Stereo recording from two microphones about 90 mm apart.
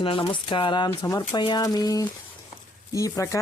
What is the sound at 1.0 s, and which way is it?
Speech, 40° left (ahead or behind).